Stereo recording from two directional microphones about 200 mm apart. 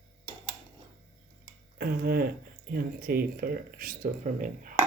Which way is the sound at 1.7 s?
50° right (ahead or behind).